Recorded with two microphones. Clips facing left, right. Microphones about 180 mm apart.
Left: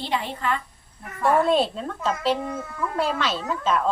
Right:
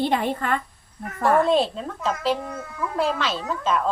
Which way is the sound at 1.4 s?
Centre (ahead or behind).